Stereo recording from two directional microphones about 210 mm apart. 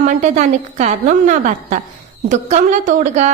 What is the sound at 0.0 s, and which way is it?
A woman's voice, 35° right (ahead or behind).